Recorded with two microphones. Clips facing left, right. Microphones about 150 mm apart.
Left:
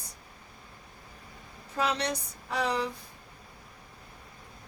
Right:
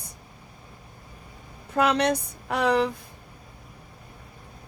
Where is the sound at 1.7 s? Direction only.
60° right (ahead or behind).